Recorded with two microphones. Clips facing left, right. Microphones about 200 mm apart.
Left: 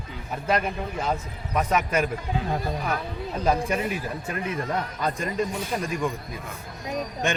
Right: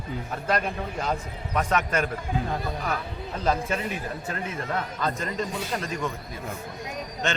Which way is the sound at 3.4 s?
15° left (ahead or behind).